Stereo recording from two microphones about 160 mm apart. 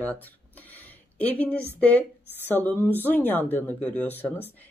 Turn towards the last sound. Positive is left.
turn(degrees=10)  # may be behind; listen again after turning